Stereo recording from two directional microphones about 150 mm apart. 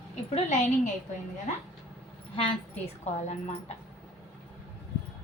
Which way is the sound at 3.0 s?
45° left (ahead or behind).